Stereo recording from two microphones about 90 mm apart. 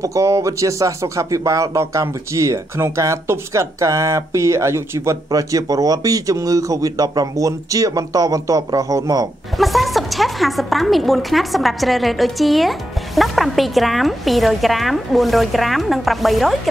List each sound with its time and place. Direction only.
0.0 s speech: 35° right (ahead or behind)
9.6 s a woman's voice: centre (ahead or behind)